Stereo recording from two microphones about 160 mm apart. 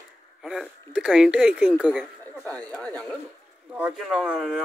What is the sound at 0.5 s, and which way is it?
Speech, 5° right (ahead or behind).